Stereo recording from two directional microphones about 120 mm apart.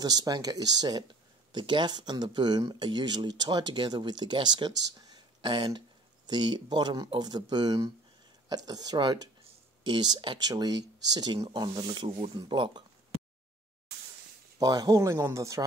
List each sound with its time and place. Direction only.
0.0 s speech: 35° right (ahead or behind)
14.6 s speech: 35° right (ahead or behind)